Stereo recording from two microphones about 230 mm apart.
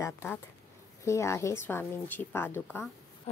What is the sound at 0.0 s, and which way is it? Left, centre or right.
A woman's voice, centre.